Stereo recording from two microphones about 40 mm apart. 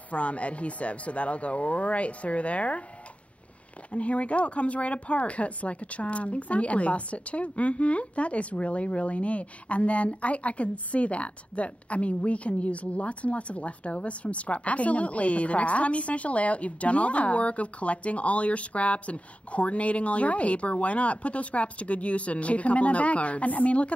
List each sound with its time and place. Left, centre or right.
0.1 s speech: left
3.9 s speech: left